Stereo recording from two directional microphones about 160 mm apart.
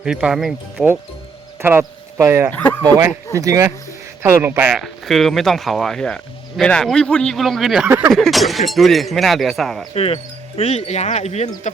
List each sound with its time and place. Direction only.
0.0 s speech: 5° right (ahead or behind)
7.9 s speech: 10° right (ahead or behind)
8.1 s speech: centre (ahead or behind)
9.9 s speech: 40° left (ahead or behind)